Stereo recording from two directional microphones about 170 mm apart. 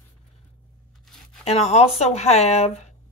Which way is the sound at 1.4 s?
40° left (ahead or behind).